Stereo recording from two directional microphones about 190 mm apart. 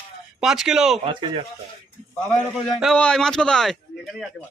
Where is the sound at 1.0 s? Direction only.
25° right (ahead or behind).